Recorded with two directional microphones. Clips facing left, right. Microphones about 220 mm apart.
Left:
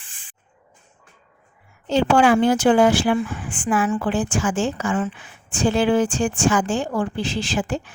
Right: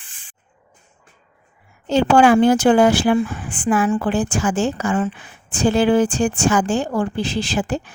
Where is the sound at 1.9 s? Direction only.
45° right (ahead or behind).